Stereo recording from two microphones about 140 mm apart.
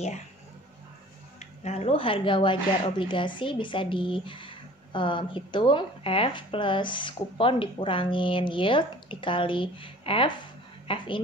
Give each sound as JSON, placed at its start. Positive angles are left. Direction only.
{"t": 1.4, "sound": "speech", "side_deg": 55}